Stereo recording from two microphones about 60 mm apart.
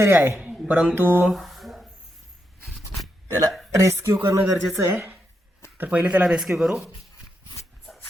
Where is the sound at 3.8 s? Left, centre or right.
Right.